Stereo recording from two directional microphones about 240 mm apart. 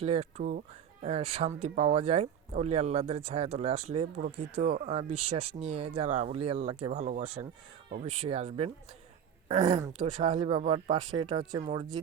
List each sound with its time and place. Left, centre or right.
0.0 s speech: right